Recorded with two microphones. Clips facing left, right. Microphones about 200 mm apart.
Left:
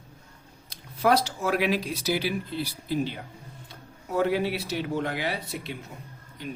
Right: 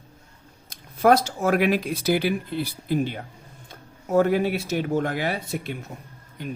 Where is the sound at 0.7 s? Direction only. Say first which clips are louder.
Right 5 dB; 50° right (ahead or behind).